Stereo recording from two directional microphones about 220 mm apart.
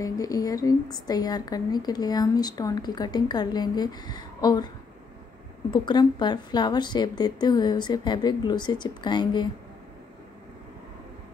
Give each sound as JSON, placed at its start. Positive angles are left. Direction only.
{"t": 0.0, "sound": "a woman's voice", "side_deg": 15}
{"t": 5.7, "sound": "a woman's voice", "side_deg": 20}